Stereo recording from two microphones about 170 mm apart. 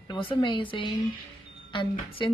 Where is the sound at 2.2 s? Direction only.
30° left (ahead or behind).